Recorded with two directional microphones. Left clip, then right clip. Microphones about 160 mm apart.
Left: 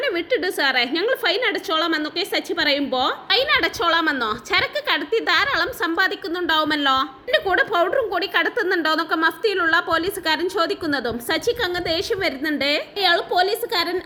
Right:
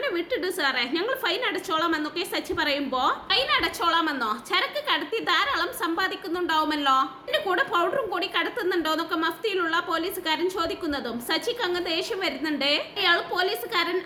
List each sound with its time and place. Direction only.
0.0 s a woman's voice: 30° left (ahead or behind)